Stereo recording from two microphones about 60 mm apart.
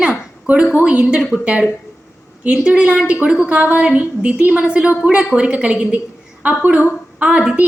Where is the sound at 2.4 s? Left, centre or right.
Right.